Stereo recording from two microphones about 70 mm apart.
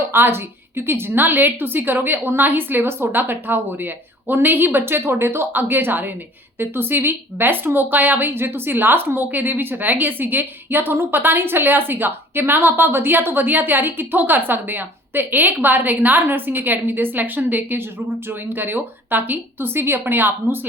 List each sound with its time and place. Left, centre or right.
0.0 s speech: right